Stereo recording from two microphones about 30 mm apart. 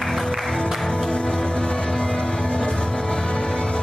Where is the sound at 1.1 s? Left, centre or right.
Left.